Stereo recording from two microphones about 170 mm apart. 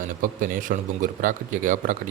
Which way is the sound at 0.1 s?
55° right (ahead or behind).